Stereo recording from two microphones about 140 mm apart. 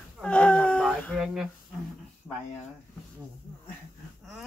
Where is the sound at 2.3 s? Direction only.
Centre (ahead or behind).